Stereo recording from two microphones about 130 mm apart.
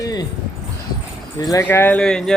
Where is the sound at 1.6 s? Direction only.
15° left (ahead or behind).